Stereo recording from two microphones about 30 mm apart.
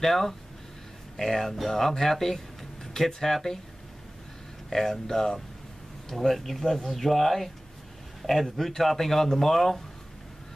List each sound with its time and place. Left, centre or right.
0.0 s speech: centre
4.6 s speech: centre
6.0 s speech: centre
8.5 s speech: centre